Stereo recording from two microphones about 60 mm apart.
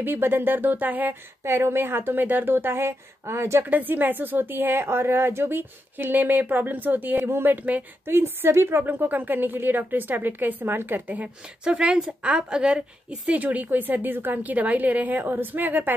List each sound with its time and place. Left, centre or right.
0.0 s speech: right
1.4 s speech: right
3.6 s speech: right
7.2 s speech: right
7.5 s a woman's voice: right
8.0 s speech: right
11.6 s a woman's voice: centre; by 15.9 s right